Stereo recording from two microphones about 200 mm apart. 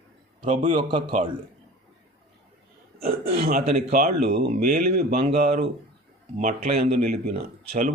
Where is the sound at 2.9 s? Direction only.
30° right (ahead or behind).